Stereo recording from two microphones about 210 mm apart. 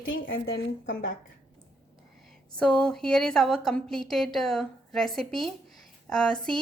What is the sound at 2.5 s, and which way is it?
A woman's voice, 5° left (ahead or behind).